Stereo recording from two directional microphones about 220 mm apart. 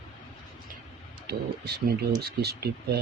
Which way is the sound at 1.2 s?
45° right (ahead or behind).